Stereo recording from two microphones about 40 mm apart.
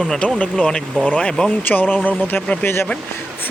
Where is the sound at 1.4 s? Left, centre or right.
Left.